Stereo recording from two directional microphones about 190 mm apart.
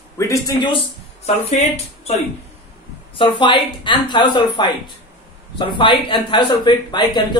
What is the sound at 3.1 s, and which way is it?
A man's voice, 25° left (ahead or behind).